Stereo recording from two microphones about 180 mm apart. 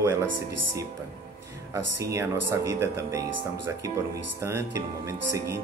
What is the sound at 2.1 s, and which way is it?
Speech, 15° right (ahead or behind).